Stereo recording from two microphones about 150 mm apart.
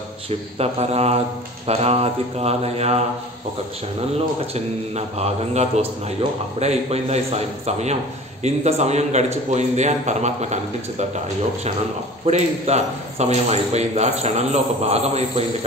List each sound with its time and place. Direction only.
0.6 s a man's voice: 45° right (ahead or behind)
4.4 s a man's voice: 45° right (ahead or behind)
12.3 s a man's voice: 50° right (ahead or behind)